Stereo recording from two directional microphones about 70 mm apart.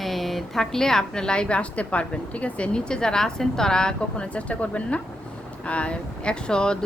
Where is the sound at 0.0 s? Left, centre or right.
Centre.